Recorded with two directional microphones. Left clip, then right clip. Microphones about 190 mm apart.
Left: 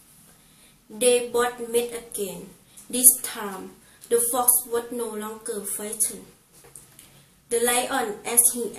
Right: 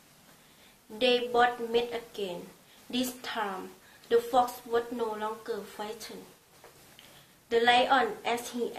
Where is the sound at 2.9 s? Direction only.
20° right (ahead or behind).